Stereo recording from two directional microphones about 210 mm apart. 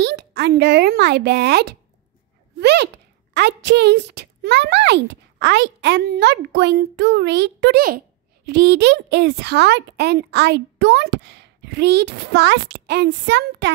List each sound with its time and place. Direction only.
0.0 s a child's voice: 50° right (ahead or behind)